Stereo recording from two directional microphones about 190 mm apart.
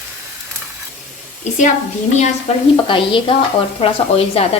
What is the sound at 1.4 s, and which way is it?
Speech, 40° left (ahead or behind).